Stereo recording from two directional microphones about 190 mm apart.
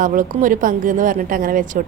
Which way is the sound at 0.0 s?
45° right (ahead or behind).